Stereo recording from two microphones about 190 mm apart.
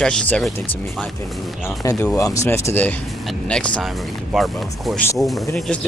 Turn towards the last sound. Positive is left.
turn(degrees=0)  # may be behind; listen again after turning